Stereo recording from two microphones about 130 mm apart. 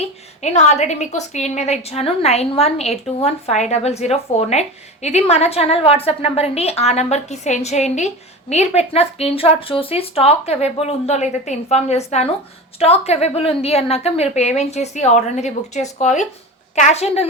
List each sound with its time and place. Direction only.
0.0 s a woman's voice: 60° left (ahead or behind)